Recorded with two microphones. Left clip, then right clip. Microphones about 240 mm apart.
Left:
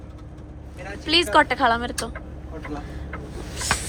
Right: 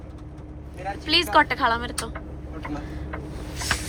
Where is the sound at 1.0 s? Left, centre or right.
Centre.